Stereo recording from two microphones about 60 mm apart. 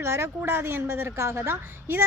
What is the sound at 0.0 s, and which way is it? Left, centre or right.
A woman's voice, right.